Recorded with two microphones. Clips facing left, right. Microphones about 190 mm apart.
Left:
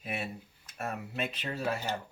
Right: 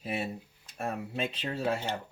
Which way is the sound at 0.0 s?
35° right (ahead or behind).